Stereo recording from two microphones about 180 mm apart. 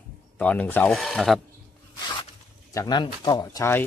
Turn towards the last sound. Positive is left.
turn(degrees=15)  # may be behind; listen again after turning